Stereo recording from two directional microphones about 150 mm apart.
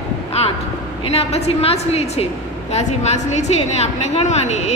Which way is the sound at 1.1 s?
45° left (ahead or behind).